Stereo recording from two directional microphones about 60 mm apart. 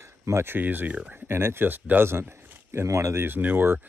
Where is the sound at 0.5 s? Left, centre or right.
Right.